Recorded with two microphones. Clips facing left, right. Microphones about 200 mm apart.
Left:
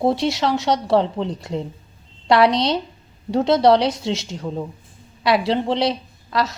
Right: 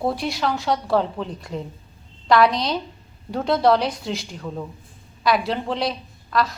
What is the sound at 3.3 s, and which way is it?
Speech, 20° left (ahead or behind).